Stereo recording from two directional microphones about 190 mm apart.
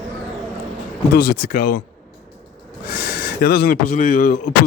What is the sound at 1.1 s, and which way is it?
Speech, 55° left (ahead or behind).